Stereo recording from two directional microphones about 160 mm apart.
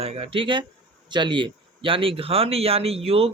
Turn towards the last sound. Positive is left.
turn(degrees=-35)  # may be behind; listen again after turning